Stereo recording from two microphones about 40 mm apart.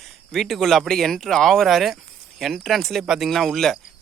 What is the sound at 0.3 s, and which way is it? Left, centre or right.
Speech, centre.